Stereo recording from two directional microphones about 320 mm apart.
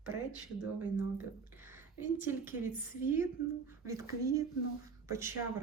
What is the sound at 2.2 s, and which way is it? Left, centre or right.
Speech, centre.